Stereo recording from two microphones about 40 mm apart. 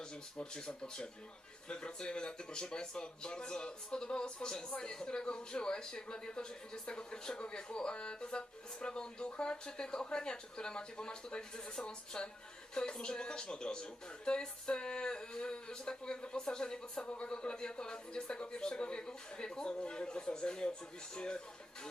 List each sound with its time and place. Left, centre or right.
0.3 s speech: centre